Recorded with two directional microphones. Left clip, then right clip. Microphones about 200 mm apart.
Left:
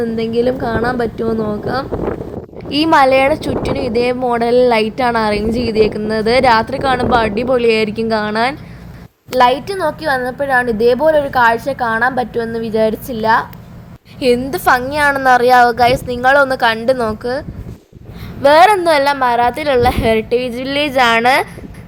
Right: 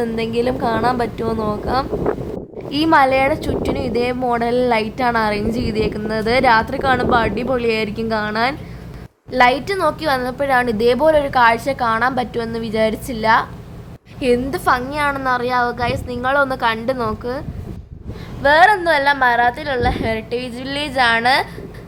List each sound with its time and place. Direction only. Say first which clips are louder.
0.0 s a woman's voice: left 4 dB; 10° left (ahead or behind)
18.4 s a woman's voice: left 4 dB; 35° left (ahead or behind)